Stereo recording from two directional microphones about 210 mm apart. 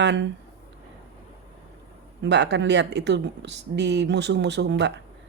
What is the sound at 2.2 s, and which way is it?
A woman's voice, 55° right (ahead or behind).